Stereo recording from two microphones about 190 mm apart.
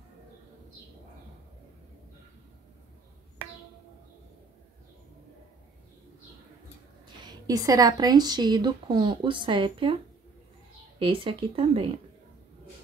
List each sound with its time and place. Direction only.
7.2 s speech: 20° right (ahead or behind)
11.0 s speech: 30° right (ahead or behind)